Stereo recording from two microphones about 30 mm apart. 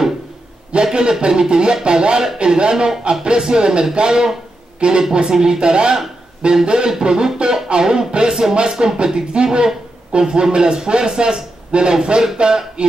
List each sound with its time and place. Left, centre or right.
0.7 s a man's voice: right